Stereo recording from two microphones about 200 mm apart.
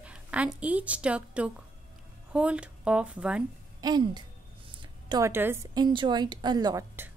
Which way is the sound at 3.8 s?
20° right (ahead or behind).